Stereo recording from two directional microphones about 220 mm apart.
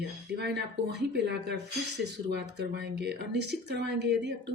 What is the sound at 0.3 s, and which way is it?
Speech, 50° right (ahead or behind).